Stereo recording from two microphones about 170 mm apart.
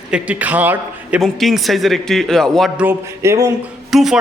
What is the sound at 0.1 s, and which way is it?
A man's voice, 10° right (ahead or behind).